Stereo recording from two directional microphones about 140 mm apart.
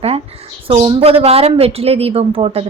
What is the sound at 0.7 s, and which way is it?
A woman's voice, 40° right (ahead or behind).